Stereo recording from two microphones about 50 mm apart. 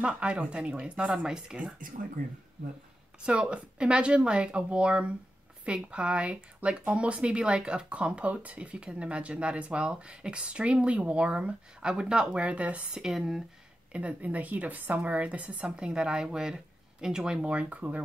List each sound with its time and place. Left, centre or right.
0.0 s speech: right
3.3 s speech: right
12.9 s speech: centre
13.9 s a woman's voice: right